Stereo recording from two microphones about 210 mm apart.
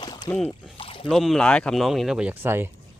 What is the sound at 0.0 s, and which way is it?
Rowboat, 20° left (ahead or behind).